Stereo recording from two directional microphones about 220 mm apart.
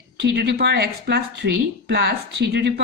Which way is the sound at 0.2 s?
50° right (ahead or behind).